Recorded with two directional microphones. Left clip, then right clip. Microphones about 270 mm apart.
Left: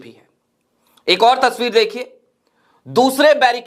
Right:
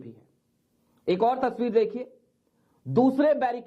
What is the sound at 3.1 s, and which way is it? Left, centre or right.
Speech, centre.